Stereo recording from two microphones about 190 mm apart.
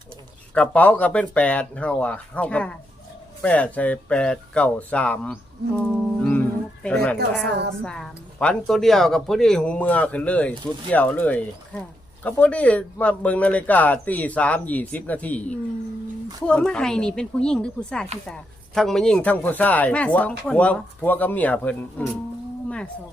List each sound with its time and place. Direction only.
0.5 s speech: 5° left (ahead or behind)